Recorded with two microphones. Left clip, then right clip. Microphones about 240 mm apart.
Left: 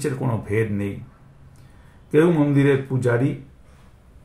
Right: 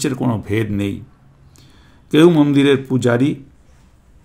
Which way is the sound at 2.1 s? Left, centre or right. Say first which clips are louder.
Right 6 dB; right.